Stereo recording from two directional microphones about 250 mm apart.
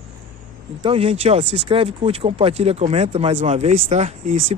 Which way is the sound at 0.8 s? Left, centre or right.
Right.